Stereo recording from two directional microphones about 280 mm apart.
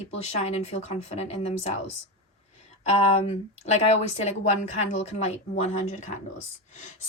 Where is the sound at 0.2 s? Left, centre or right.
Left.